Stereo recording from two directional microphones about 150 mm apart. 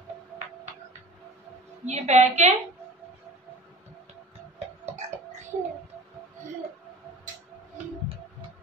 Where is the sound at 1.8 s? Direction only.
50° right (ahead or behind).